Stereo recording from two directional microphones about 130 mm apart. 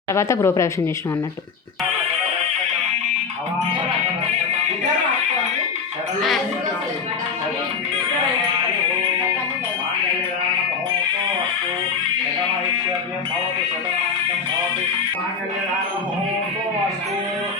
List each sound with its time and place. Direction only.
0.1 s speech: 20° left (ahead or behind)